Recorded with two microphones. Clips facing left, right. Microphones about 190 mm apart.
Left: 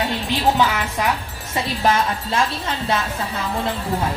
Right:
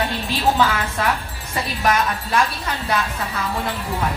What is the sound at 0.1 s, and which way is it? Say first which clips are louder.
Speech: left 1 dB; 20° left (ahead or behind).